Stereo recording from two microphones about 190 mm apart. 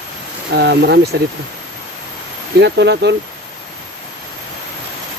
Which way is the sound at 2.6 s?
65° right (ahead or behind).